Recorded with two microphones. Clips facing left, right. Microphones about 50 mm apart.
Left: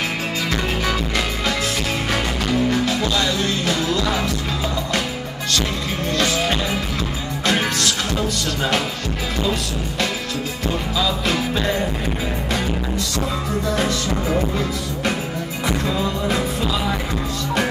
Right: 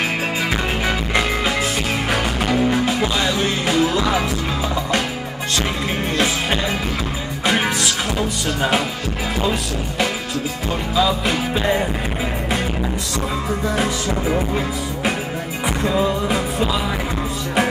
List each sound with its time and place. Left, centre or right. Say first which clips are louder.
0.5 s music: right 1 dB; right
6.1 s music: left 1 dB; centre
9.4 s music: right 1 dB; centre
13.7 s music: even; centre
15.6 s music: right 3 dB; centre